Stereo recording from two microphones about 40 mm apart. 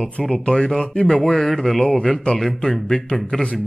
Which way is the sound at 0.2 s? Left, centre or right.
Centre.